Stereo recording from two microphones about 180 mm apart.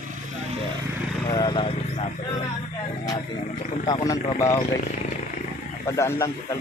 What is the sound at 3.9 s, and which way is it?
Speech, 25° left (ahead or behind).